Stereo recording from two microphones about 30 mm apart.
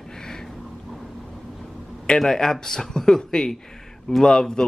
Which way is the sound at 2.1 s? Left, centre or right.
Centre.